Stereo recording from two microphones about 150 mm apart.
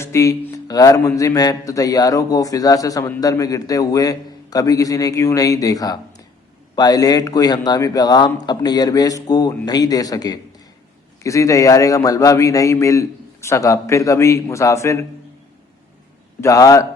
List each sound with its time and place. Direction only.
0.0 s a man's voice: 20° left (ahead or behind)
16.4 s a man's voice: 20° left (ahead or behind)